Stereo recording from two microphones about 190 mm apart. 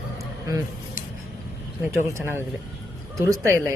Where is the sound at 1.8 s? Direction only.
10° right (ahead or behind).